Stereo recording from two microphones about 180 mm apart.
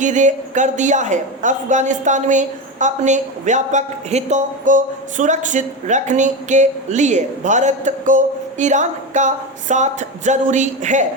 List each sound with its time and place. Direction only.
0.0 s a woman's voice: 40° right (ahead or behind)